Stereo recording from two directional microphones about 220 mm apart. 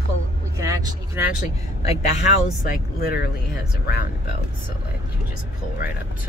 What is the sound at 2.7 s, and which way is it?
Speech, 45° left (ahead or behind).